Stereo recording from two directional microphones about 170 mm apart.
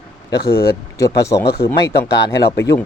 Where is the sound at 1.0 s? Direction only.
20° left (ahead or behind).